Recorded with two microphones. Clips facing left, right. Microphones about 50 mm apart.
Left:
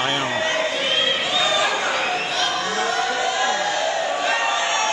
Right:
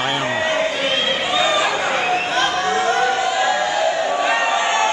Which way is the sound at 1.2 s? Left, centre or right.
Centre.